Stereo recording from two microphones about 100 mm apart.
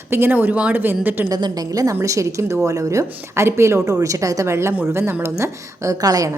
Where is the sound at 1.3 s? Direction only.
40° right (ahead or behind).